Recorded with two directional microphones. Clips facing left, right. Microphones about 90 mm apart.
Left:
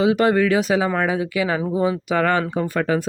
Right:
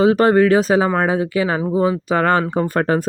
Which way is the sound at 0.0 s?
40° right (ahead or behind).